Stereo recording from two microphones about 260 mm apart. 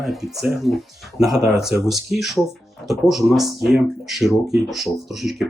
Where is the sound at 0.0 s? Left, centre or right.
Centre.